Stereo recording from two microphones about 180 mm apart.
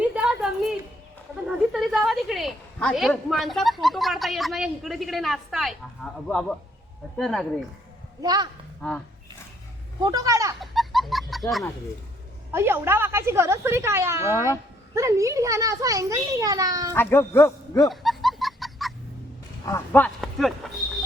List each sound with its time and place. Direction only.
0.0 s a sound: 5° right (ahead or behind)
3.1 s a woman's voice: centre (ahead or behind)
8.2 s a child's voice: 20° right (ahead or behind)
10.0 s a child's voice: 20° right (ahead or behind)
10.6 s fowl: centre (ahead or behind)
12.5 s a woman's voice: 15° right (ahead or behind)
16.9 s speech: 15° left (ahead or behind)
17.8 s music: centre (ahead or behind)
19.6 s speech: 10° left (ahead or behind)
20.6 s a sound: centre (ahead or behind)